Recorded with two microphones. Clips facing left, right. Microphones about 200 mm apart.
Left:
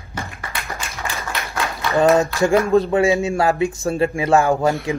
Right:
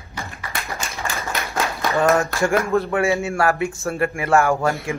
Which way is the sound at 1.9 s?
15° left (ahead or behind).